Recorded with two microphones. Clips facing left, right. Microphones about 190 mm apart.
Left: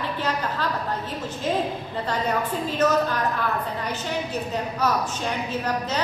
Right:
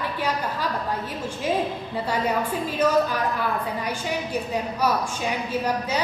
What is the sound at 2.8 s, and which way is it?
A woman's voice, 10° right (ahead or behind).